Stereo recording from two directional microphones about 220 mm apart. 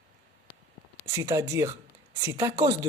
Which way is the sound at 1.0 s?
15° right (ahead or behind).